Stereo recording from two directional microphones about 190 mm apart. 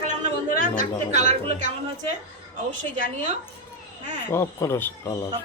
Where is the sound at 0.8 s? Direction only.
40° right (ahead or behind).